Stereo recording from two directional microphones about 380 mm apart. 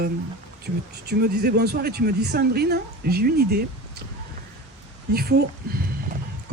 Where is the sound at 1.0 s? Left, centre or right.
Right.